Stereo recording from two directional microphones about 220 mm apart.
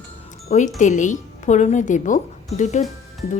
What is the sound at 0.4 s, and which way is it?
Speech, 35° left (ahead or behind).